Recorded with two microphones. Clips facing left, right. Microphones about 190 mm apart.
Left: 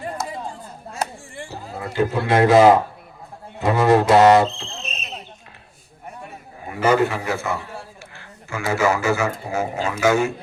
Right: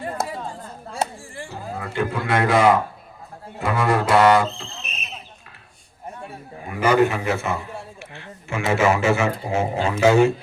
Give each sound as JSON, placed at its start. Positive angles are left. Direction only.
{"t": 1.0, "sound": "chop", "side_deg": -25}
{"t": 1.9, "sound": "speech", "side_deg": 30}
{"t": 4.1, "sound": "a sound", "side_deg": 25}
{"t": 6.9, "sound": "a man's voice", "side_deg": -20}